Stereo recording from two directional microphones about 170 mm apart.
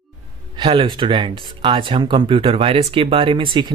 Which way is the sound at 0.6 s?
25° right (ahead or behind).